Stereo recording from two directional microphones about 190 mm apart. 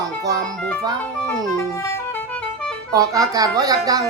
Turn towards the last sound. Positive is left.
turn(degrees=-20)  # may be behind; listen again after turning